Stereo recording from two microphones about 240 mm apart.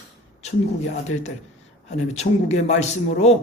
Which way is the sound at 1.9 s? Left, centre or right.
Left.